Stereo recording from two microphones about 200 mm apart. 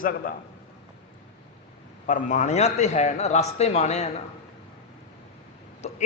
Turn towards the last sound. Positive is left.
turn(degrees=35)  # may be behind; listen again after turning